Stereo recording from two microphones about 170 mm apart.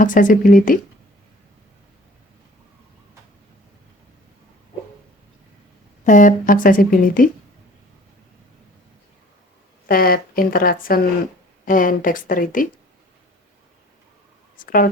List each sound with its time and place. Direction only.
0.0 s speech: 50° left (ahead or behind)
6.1 s speech: 50° left (ahead or behind)
9.9 s speech: 60° left (ahead or behind)
14.5 s speech: 55° left (ahead or behind)